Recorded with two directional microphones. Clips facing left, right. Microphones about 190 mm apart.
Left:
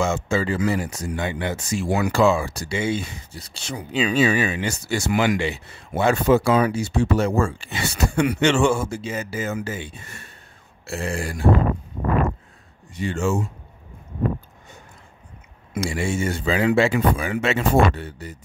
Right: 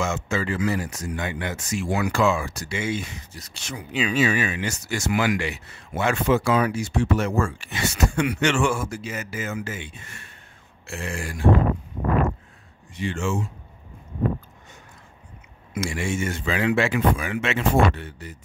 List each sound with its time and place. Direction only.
0.0 s speech: 30° left (ahead or behind)
12.9 s speech: 40° left (ahead or behind)
15.7 s speech: 35° left (ahead or behind)